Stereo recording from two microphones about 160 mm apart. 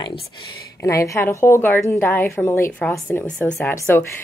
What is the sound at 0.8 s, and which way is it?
A woman's voice, 20° left (ahead or behind).